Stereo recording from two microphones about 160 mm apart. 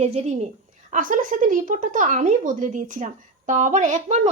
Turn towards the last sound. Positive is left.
turn(degrees=-50)  # may be behind; listen again after turning